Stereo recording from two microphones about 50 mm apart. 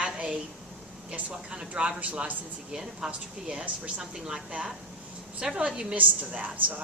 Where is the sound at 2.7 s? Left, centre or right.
Centre.